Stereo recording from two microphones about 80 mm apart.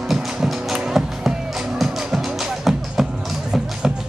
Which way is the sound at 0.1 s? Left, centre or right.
Centre.